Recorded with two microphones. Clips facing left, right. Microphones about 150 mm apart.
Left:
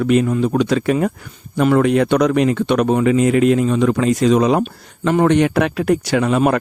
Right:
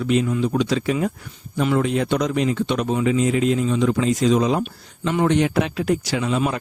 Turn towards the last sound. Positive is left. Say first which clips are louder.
# left 7 dB
turn(degrees=60)  # may be behind; listen again after turning